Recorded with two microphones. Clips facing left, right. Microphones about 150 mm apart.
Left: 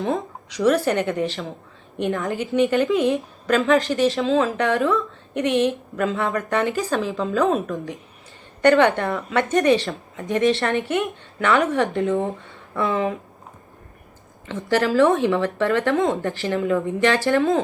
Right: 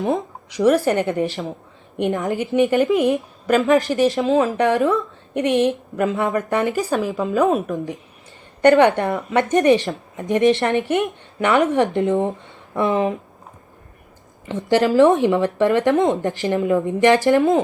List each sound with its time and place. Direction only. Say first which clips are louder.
0.1 s a woman's voice: right 3 dB; 15° right (ahead or behind)
14.4 s speech: right 3 dB; 15° right (ahead or behind)